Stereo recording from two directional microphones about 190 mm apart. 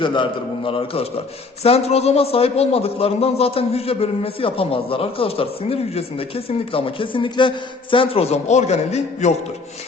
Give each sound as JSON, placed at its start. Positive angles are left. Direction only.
{"t": 0.0, "sound": "a man's voice", "side_deg": 25}